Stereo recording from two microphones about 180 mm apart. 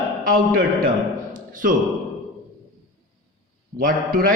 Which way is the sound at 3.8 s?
55° right (ahead or behind).